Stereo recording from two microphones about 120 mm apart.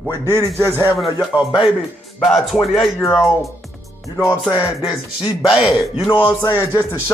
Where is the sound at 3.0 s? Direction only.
25° left (ahead or behind).